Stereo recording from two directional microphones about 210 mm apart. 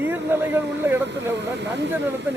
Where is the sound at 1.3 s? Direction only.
55° right (ahead or behind).